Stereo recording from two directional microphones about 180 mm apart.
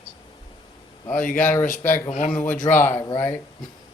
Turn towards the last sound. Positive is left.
turn(degrees=15)  # may be behind; listen again after turning